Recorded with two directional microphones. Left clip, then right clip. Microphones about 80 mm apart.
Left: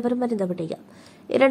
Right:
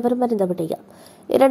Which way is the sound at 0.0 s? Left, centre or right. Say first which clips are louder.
Right 5 dB; centre.